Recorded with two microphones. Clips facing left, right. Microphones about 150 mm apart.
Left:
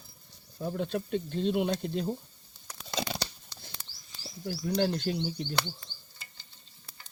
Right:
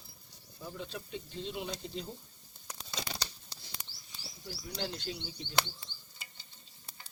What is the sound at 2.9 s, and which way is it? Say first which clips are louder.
Tearing: left 8 dB; 70° left (ahead or behind).